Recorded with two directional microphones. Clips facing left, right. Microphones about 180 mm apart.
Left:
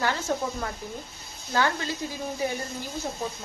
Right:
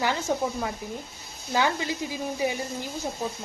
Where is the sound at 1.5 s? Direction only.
15° right (ahead or behind).